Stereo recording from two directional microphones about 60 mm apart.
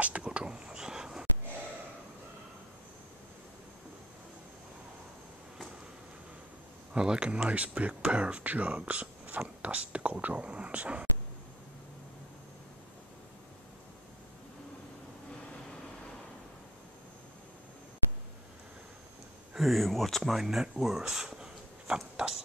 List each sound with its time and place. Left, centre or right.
0.0 s whispering: right
6.9 s speech: centre
19.5 s speech: centre
20.3 s speech: centre